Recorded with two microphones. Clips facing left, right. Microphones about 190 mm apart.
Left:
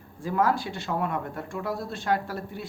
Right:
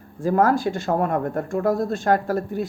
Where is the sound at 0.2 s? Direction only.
45° right (ahead or behind).